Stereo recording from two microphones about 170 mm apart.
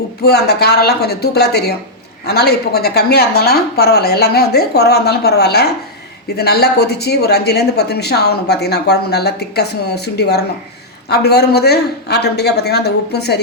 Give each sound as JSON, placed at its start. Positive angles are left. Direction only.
{"t": 0.2, "sound": "speech", "side_deg": 70}